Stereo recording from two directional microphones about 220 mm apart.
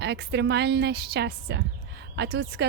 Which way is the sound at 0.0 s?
50° right (ahead or behind).